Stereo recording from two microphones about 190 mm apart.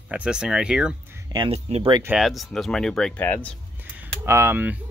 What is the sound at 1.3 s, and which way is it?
Speech, 30° right (ahead or behind).